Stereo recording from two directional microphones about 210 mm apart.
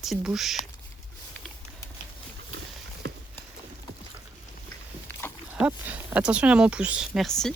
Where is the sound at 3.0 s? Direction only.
55° right (ahead or behind).